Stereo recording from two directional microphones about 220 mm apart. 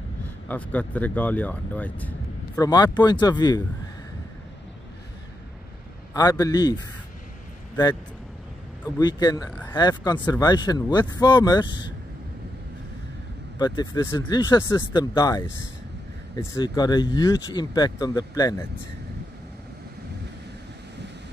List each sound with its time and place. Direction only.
0.5 s speech: 5° left (ahead or behind)
6.1 s speech: 15° left (ahead or behind)
13.6 s speech: 20° left (ahead or behind)